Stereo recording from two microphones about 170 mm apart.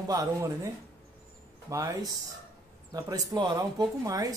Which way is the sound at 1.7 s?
20° right (ahead or behind).